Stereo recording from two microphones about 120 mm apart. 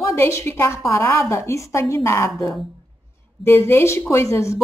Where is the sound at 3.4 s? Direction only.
20° left (ahead or behind).